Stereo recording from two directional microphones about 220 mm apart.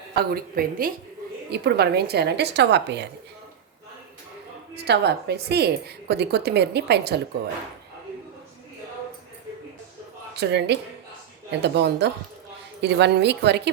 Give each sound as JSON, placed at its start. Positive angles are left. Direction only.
{"t": 0.2, "sound": "a woman's voice", "side_deg": -40}
{"t": 4.7, "sound": "a woman's voice", "side_deg": -50}
{"t": 10.3, "sound": "a woman's voice", "side_deg": -50}